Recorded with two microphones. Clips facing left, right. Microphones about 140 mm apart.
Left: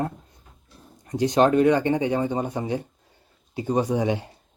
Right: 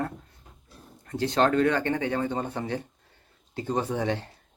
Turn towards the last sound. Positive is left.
turn(degrees=10)  # may be behind; listen again after turning